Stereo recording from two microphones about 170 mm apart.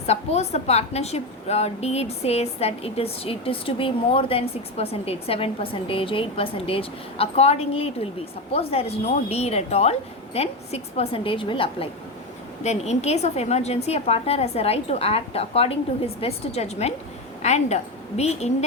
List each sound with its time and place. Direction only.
0.1 s a woman's voice: 40° left (ahead or behind)